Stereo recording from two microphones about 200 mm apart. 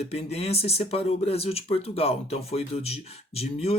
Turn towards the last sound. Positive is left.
turn(degrees=30)  # may be behind; listen again after turning